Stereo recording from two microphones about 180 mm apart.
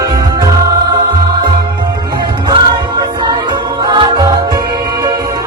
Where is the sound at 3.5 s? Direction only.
25° right (ahead or behind).